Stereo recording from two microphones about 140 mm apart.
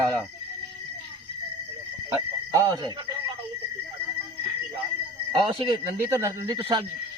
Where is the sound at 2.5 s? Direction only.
30° right (ahead or behind).